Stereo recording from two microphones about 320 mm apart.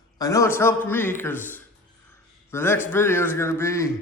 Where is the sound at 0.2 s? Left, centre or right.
Centre.